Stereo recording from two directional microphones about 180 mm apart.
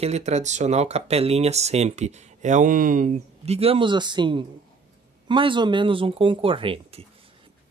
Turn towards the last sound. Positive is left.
turn(degrees=-30)  # may be behind; listen again after turning